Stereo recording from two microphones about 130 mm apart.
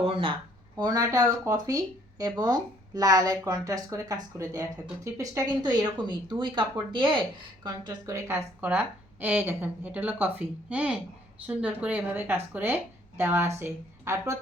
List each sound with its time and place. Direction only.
0.0 s speech: 45° right (ahead or behind)
0.8 s speech: 30° right (ahead or behind)
8.1 s a woman's voice: 15° right (ahead or behind)